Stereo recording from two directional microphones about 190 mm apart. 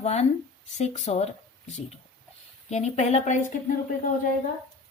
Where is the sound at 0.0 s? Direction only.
35° left (ahead or behind).